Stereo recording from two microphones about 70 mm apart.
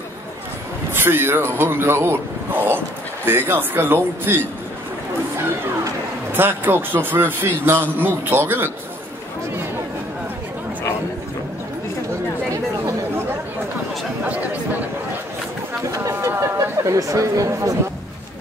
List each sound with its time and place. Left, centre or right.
0.9 s speech: right
6.3 s a man's voice: right
14.2 s chatter: right
15.9 s speech: right